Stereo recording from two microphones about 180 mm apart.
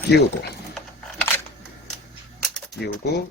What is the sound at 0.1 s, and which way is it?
Speech, 65° left (ahead or behind).